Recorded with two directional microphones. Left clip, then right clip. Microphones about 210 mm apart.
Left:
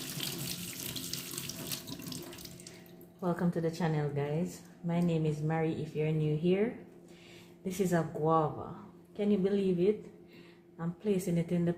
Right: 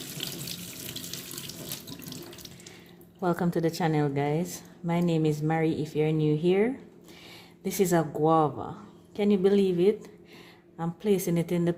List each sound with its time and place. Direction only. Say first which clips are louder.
3.2 s speech: right 6 dB; 50° right (ahead or behind)